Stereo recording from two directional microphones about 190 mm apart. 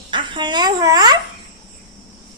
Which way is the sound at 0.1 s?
25° right (ahead or behind).